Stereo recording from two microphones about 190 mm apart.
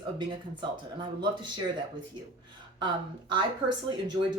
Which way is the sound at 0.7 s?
25° right (ahead or behind).